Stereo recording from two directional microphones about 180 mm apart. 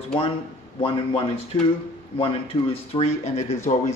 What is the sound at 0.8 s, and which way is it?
A man's voice, 30° left (ahead or behind).